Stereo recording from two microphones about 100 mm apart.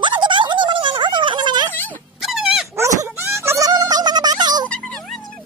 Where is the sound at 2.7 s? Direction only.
25° right (ahead or behind); by 4.7 s 45° right (ahead or behind).